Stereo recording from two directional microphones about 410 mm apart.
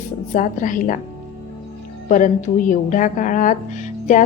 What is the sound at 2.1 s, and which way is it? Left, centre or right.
A woman's voice, centre.